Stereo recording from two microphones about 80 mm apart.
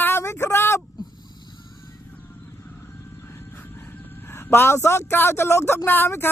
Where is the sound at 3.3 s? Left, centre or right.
Left.